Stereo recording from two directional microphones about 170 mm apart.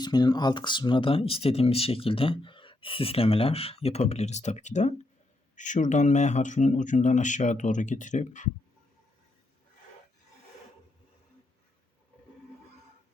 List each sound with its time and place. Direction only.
0.0 s speech: 25° left (ahead or behind); by 8.4 s 45° left (ahead or behind)